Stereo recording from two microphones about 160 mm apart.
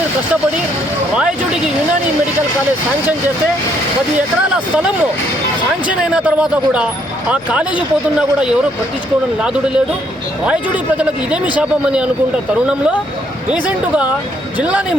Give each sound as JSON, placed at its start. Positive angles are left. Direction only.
{"t": 1.1, "sound": "speech", "side_deg": -5}
{"t": 5.9, "sound": "speech", "side_deg": -5}
{"t": 9.4, "sound": "speech", "side_deg": -5}
{"t": 13.5, "sound": "speech", "side_deg": -10}